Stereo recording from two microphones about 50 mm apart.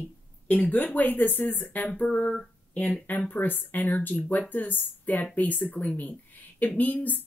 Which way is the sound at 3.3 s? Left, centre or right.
Left.